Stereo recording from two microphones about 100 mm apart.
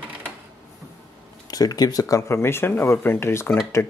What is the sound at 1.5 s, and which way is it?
Speech, 40° left (ahead or behind).